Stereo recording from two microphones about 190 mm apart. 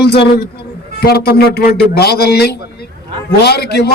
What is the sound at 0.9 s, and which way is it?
A man's voice, 55° left (ahead or behind).